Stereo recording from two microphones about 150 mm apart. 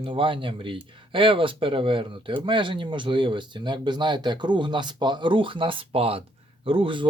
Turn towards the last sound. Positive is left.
turn(degrees=-35)  # may be behind; listen again after turning